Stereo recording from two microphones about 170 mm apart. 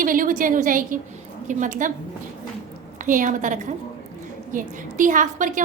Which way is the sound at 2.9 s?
50° right (ahead or behind).